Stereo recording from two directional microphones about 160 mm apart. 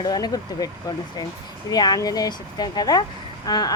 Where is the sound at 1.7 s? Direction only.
25° left (ahead or behind).